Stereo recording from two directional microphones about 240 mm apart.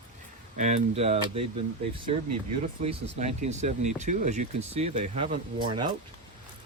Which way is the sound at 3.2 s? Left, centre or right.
Right.